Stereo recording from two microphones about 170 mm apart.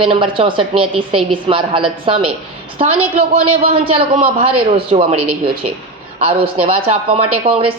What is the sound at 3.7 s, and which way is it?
A woman's voice, 35° right (ahead or behind).